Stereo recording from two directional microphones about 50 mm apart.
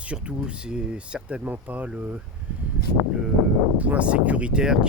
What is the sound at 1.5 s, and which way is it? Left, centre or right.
Speech, right.